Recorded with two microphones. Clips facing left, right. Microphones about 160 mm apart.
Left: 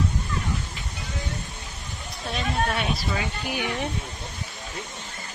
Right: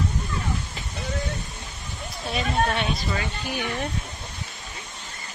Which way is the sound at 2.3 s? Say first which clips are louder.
Right 2 dB; 5° left (ahead or behind).